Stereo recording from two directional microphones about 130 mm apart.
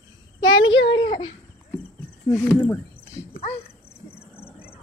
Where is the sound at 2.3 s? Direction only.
10° left (ahead or behind).